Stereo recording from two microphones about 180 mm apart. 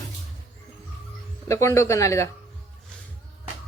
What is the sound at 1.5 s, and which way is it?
Speech, 15° left (ahead or behind).